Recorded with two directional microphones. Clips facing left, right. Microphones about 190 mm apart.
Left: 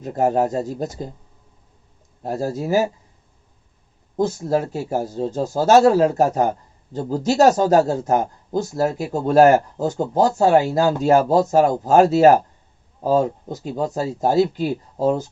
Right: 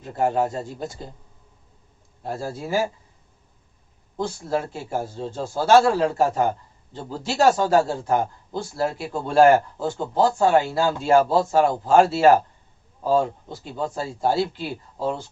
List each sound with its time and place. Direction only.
0.0 s a man's voice: 40° left (ahead or behind)
2.2 s a man's voice: 40° left (ahead or behind)
4.2 s a man's voice: 40° left (ahead or behind)